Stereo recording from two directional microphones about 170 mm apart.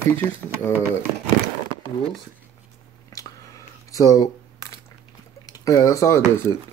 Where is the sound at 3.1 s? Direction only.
20° left (ahead or behind).